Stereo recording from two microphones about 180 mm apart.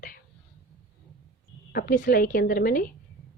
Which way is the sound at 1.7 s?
55° left (ahead or behind).